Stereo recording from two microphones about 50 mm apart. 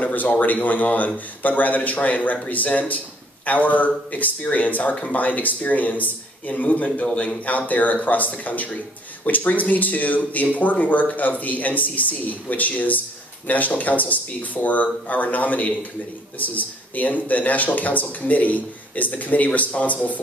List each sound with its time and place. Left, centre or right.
0.0 s speech: left
7.4 s speech: left